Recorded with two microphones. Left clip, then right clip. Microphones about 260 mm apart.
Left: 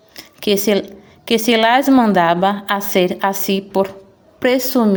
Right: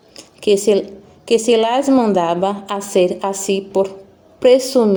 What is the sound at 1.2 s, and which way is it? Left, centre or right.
A woman's voice, left.